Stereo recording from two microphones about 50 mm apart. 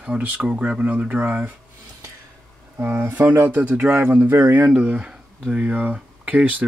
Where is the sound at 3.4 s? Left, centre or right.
Right.